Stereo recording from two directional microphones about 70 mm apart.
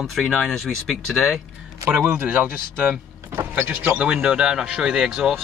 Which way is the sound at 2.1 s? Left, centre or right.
Right.